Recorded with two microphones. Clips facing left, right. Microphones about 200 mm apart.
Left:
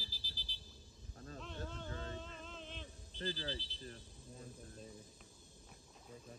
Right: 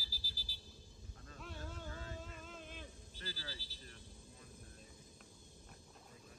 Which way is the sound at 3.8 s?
35° left (ahead or behind).